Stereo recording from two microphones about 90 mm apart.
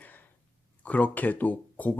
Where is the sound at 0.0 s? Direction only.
20° left (ahead or behind).